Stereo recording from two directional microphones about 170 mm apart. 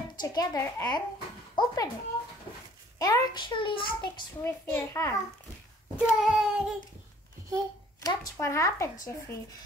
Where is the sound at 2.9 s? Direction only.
20° left (ahead or behind).